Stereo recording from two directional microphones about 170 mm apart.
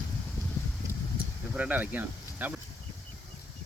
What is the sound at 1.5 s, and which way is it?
Speech, 10° right (ahead or behind).